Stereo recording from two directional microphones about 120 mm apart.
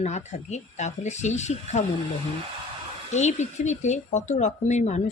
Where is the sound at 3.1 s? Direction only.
75° left (ahead or behind).